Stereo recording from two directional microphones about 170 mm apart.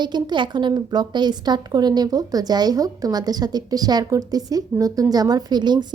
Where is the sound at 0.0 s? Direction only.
25° right (ahead or behind).